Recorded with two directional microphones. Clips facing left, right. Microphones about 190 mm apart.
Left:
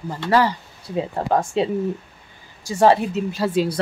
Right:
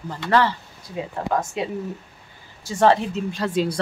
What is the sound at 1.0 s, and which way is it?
Speech, 30° left (ahead or behind).